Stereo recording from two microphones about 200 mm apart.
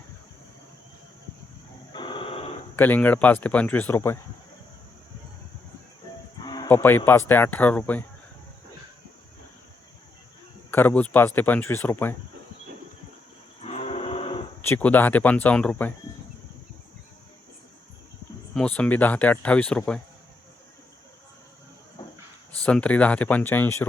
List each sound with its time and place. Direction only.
1.9 s a sound: 25° left (ahead or behind)
2.7 s a man's voice: 10° left (ahead or behind)
6.4 s speech: 20° left (ahead or behind)
10.7 s a man's voice: 10° left (ahead or behind)
13.6 s a sound: 30° left (ahead or behind)
14.6 s a man's voice: 10° left (ahead or behind)
18.5 s a man's voice: 5° left (ahead or behind)
22.6 s a man's voice: 5° left (ahead or behind)